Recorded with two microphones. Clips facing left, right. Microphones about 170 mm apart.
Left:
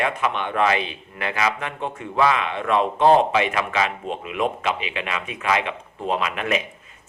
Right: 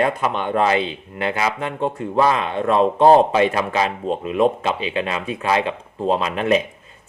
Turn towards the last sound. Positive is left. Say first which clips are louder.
# right 5 dB
turn(degrees=-35)  # may be behind; listen again after turning